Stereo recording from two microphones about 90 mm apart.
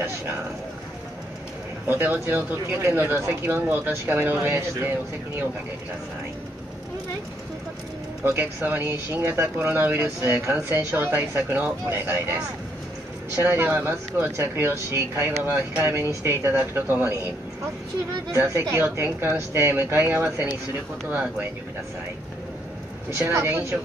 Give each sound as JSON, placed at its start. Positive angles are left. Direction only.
{"t": 1.9, "sound": "speech", "side_deg": -20}
{"t": 8.3, "sound": "speech", "side_deg": -20}
{"t": 13.4, "sound": "speech", "side_deg": -25}
{"t": 18.4, "sound": "speech", "side_deg": -35}
{"t": 23.0, "sound": "speech", "side_deg": -25}